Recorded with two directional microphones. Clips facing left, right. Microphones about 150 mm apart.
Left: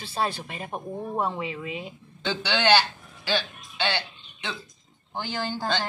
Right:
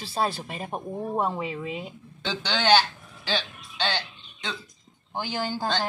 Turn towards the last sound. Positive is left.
turn(degrees=-15)  # may be behind; listen again after turning